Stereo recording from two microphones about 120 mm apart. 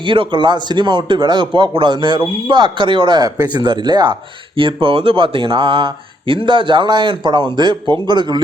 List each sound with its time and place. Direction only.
0.0 s speech: 45° right (ahead or behind)